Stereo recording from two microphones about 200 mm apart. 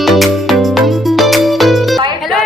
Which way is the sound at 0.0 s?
Centre (ahead or behind).